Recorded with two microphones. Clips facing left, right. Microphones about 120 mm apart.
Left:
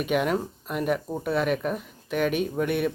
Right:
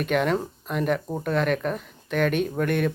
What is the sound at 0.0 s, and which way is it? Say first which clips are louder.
Speech: right 1 dB; 5° left (ahead or behind).